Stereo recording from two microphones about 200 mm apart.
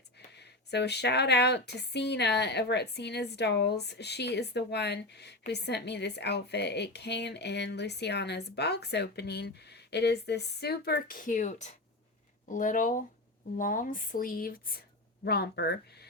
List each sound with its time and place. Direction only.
0.3 s a woman's voice: 55° left (ahead or behind)